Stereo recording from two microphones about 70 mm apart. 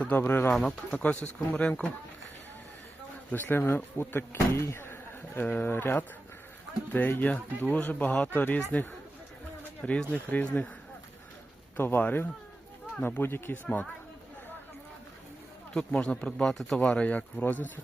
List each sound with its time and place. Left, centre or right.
0.0 s speech: left
0.5 s speech: centre
3.3 s speech: left
11.8 s speech: left
15.7 s speech: centre